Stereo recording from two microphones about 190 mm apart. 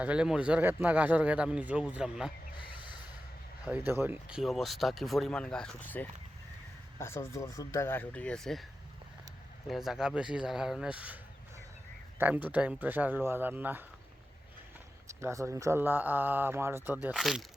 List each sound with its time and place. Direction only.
0.0 s a man's voice: 5° right (ahead or behind)
2.6 s a sound: 25° left (ahead or behind)
3.6 s speech: 10° right (ahead or behind)
9.6 s speech: centre (ahead or behind)
12.2 s a man's voice: 5° right (ahead or behind)
15.0 s a man's voice: 15° right (ahead or behind)